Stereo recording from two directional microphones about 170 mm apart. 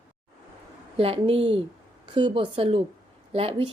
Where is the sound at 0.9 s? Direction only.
35° right (ahead or behind).